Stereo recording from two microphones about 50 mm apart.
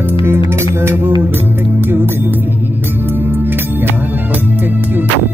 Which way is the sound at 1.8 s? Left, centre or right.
Right.